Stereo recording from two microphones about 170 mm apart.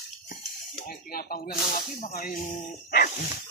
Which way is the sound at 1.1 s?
60° left (ahead or behind).